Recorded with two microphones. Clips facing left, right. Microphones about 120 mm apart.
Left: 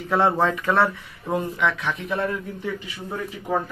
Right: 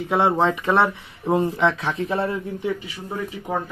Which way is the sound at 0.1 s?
20° right (ahead or behind).